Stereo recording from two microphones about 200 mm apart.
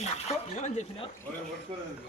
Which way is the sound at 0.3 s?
35° left (ahead or behind).